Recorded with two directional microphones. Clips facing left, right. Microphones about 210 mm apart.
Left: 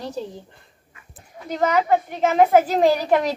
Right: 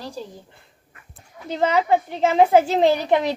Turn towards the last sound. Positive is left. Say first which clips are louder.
# even
turn(degrees=-20)  # may be behind; listen again after turning